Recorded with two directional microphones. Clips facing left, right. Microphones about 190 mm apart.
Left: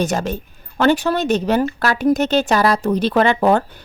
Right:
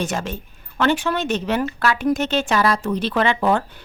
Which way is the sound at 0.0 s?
40° left (ahead or behind).